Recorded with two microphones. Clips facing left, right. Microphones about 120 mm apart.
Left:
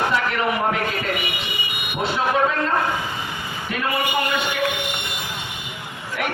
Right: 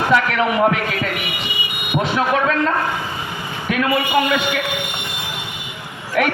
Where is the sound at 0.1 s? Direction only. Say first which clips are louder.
Right 5 dB; 90° right.